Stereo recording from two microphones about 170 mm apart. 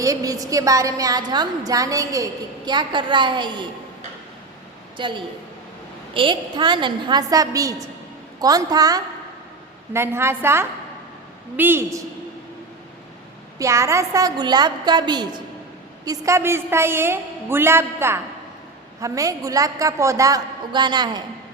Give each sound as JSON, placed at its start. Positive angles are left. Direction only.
{"t": 0.0, "sound": "a woman's voice", "side_deg": -20}
{"t": 4.9, "sound": "a woman's voice", "side_deg": -30}
{"t": 13.6, "sound": "a woman's voice", "side_deg": -15}